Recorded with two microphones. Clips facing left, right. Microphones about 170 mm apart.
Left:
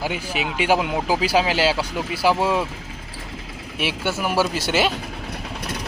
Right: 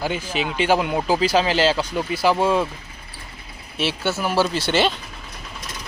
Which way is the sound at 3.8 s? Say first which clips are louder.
Right 1 dB; 10° left (ahead or behind).